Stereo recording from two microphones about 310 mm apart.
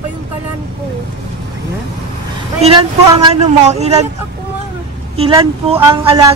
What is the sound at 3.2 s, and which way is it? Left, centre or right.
Speech, right.